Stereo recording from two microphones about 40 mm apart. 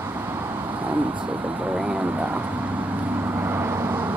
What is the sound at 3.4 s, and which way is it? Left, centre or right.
Vehicle, right.